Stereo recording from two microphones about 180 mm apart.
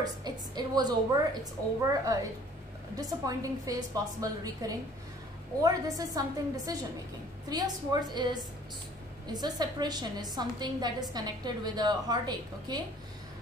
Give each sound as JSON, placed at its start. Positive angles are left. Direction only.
{"t": 0.0, "sound": "a woman's voice", "side_deg": -20}